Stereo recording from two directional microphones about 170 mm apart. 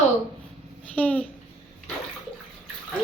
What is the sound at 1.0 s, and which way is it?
Speech, 10° left (ahead or behind).